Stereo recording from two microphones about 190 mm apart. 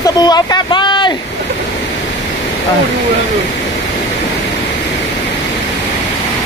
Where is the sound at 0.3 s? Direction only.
20° left (ahead or behind).